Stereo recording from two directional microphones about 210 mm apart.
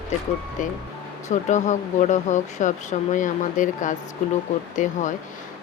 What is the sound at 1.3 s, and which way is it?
Speech, 35° left (ahead or behind).